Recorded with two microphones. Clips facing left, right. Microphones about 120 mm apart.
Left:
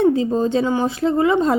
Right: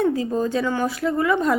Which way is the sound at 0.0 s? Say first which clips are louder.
Left 4 dB; 25° left (ahead or behind).